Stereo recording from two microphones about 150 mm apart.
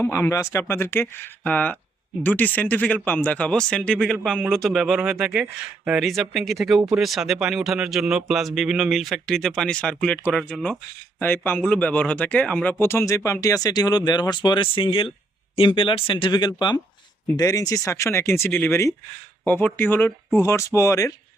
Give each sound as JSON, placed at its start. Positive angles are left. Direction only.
{"t": 0.0, "sound": "speech", "side_deg": 15}